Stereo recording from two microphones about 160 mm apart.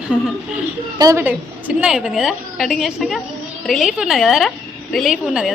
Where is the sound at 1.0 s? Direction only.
20° right (ahead or behind).